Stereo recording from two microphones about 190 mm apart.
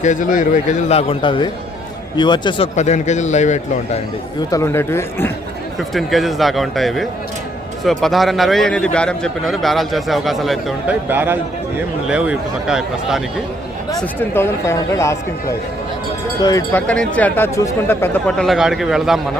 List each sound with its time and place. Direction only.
0.0 s a man's voice: 40° left (ahead or behind); by 2.6 s 25° left (ahead or behind)
2.7 s a man's voice: 40° left (ahead or behind)
4.5 s speech: 15° left (ahead or behind)
5.9 s a man's voice: centre (ahead or behind)
11.1 s a man's voice: 10° right (ahead or behind)
13.9 s speech: 10° left (ahead or behind)
16.4 s speech: 20° left (ahead or behind)
16.8 s a man's voice: 5° left (ahead or behind)